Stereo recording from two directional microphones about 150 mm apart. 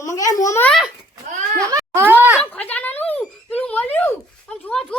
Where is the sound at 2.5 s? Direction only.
10° left (ahead or behind).